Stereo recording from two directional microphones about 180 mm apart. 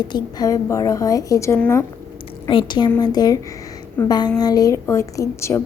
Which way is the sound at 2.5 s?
25° left (ahead or behind).